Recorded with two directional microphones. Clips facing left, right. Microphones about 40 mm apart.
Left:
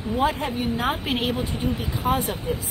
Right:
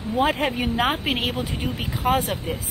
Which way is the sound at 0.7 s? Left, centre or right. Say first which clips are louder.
Right 2 dB; right.